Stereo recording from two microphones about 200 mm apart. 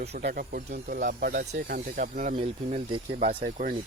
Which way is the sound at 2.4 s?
30° right (ahead or behind).